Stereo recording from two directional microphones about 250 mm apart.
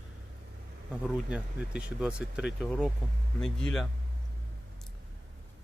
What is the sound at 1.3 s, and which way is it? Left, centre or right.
Speech, centre.